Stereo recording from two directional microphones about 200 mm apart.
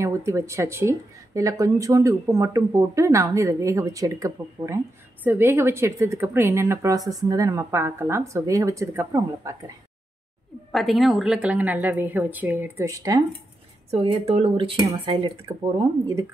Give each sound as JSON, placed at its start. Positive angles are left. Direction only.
{"t": 0.0, "sound": "speech", "side_deg": -15}
{"t": 10.7, "sound": "speech", "side_deg": 0}
{"t": 13.8, "sound": "speech", "side_deg": -30}